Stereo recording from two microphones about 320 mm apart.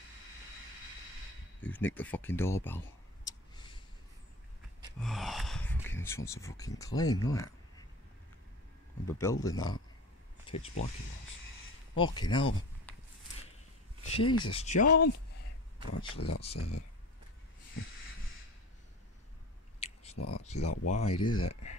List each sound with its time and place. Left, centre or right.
1.6 s speech: centre
3.3 s a sound: centre
5.0 s gasp: centre
7.0 s speech: centre
9.0 s speech: centre
10.4 s a sound: centre
12.0 s speech: centre
12.9 s a sound: centre
14.1 s speech: centre
16.1 s speech: left
19.8 s a sound: centre
20.2 s speech: left
20.9 s speech: centre